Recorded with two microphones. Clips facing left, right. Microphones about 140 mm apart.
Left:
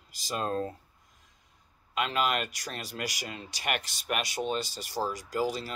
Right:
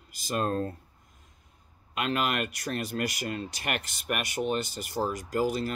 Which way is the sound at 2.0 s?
55° right (ahead or behind).